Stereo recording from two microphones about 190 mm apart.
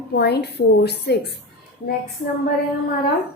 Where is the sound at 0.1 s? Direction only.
60° left (ahead or behind).